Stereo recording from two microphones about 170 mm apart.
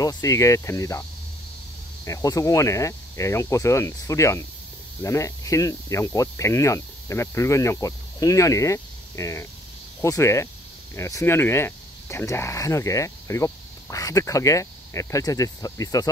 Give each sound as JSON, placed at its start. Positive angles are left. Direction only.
{"t": 0.0, "sound": "speech", "side_deg": 20}
{"t": 2.0, "sound": "speech", "side_deg": 20}